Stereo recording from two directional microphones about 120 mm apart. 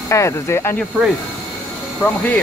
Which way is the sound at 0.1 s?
25° left (ahead or behind).